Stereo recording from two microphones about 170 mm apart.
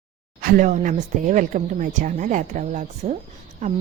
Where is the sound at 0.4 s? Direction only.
50° right (ahead or behind).